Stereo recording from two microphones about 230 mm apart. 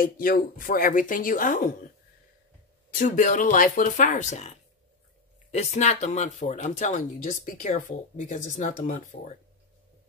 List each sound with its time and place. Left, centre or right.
0.0 s speech: left
2.9 s speech: left